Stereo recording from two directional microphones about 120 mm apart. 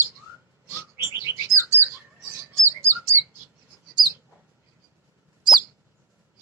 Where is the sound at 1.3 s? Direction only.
20° right (ahead or behind).